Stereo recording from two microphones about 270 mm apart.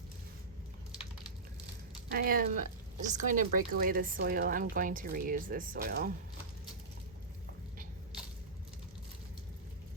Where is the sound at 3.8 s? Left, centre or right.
Right.